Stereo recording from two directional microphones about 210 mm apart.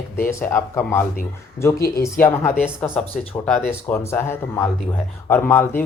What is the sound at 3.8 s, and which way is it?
Speech, 10° left (ahead or behind).